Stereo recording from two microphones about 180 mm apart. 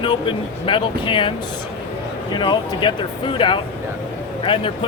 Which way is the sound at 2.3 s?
25° left (ahead or behind).